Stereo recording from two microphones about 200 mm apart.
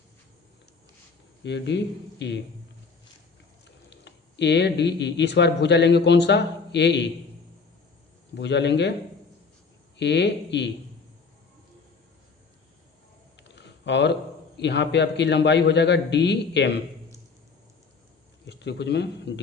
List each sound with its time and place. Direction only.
1.5 s a man's voice: 60° left (ahead or behind)
3.8 s speech: 60° left (ahead or behind)
8.4 s a man's voice: 60° left (ahead or behind)
10.0 s a man's voice: 60° left (ahead or behind)
13.6 s a man's voice: 60° left (ahead or behind)
18.4 s a man's voice: 60° left (ahead or behind)